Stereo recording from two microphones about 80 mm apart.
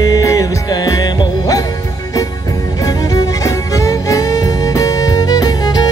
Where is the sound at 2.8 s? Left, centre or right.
Left.